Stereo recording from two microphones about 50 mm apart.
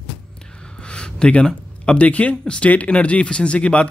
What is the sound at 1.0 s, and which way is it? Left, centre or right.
Speech, centre.